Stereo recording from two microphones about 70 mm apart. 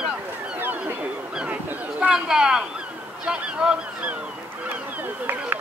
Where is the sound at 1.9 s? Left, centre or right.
Centre.